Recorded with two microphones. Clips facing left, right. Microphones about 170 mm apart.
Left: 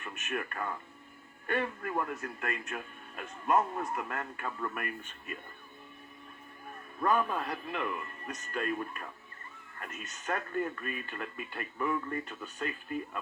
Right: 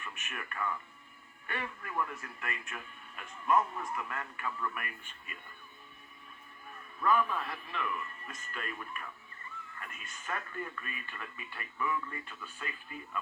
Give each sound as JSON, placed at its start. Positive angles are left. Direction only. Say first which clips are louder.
{"t": 0.0, "sound": "speech", "louder": "left 8 dB", "side_deg": 35}
{"t": 7.3, "sound": "speech", "louder": "left 3 dB", "side_deg": 40}